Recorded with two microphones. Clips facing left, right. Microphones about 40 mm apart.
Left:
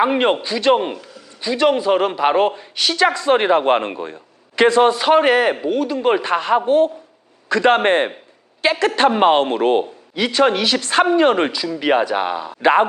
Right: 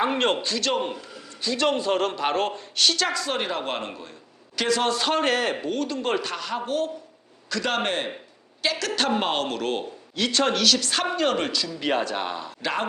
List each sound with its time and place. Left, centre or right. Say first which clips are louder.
0.0 s a man's voice: left 7 dB; centre
0.7 s speech: left 11 dB; left
1.4 s a man's voice: left 7 dB; centre
4.9 s speech: left 9 dB; centre
6.3 s a man's voice: left 12 dB; left
10.2 s a man's voice: left 7 dB; centre
11.8 s a man's voice: left 9 dB; centre